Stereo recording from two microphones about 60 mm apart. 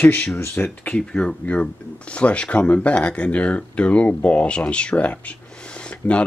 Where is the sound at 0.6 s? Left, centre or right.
Left.